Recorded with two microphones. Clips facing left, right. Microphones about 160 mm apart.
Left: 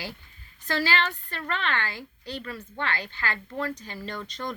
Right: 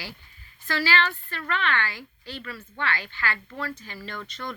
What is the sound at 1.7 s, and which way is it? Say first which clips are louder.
Speech: right 2 dB; 40° left (ahead or behind).